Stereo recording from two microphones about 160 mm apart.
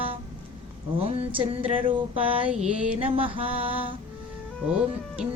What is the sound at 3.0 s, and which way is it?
Music, 35° right (ahead or behind).